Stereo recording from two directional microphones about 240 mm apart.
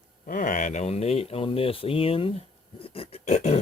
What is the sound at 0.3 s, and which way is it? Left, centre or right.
Speech, left.